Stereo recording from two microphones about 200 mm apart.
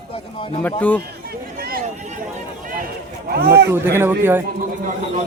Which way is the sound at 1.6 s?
45° right (ahead or behind).